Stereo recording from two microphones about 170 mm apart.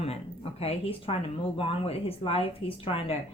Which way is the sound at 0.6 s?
35° left (ahead or behind).